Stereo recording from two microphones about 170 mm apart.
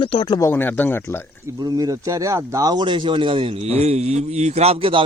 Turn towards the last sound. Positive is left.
turn(degrees=-35)  # may be behind; listen again after turning